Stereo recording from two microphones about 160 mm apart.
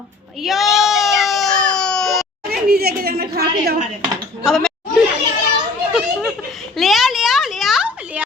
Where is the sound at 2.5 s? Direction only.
75° right (ahead or behind).